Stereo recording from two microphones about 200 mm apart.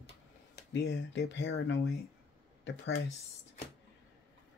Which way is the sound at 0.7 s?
60° left (ahead or behind).